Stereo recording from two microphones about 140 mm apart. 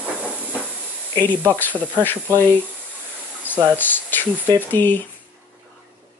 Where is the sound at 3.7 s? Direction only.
15° left (ahead or behind).